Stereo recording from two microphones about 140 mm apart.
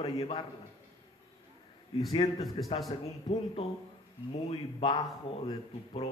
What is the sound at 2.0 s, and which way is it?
Speech, 30° left (ahead or behind).